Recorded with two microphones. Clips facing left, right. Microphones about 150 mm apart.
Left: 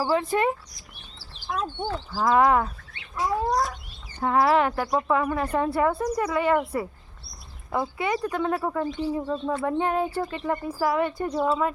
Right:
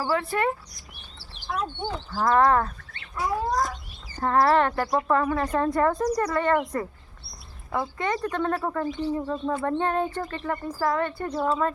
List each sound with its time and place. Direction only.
0.0 s speech: 20° left (ahead or behind)
1.6 s speech: 5° left (ahead or behind)